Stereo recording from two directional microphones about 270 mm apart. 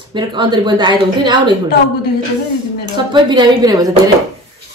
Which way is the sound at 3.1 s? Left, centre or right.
Centre.